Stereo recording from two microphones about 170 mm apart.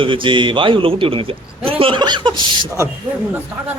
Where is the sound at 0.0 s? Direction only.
30° right (ahead or behind).